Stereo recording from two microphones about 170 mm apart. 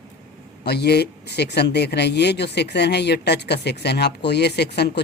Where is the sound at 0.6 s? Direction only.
70° left (ahead or behind).